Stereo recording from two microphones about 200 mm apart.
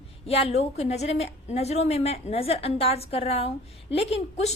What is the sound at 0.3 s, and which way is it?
A woman's voice, 30° left (ahead or behind).